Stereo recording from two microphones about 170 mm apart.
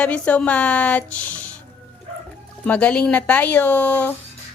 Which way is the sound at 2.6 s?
5° left (ahead or behind).